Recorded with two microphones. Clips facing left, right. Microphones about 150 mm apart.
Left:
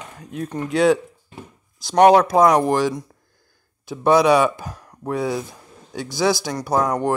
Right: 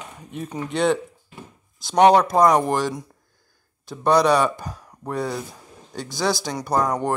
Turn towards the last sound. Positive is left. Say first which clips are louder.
# left 2 dB
turn(degrees=5)  # may be behind; listen again after turning